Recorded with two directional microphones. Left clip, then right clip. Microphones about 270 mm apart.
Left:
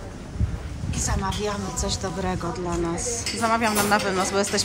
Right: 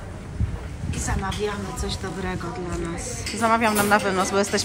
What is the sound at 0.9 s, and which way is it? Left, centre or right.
A woman's voice, centre.